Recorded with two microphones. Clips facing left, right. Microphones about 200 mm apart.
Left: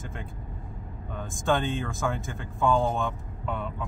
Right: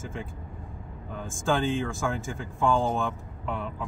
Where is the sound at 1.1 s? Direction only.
Centre (ahead or behind).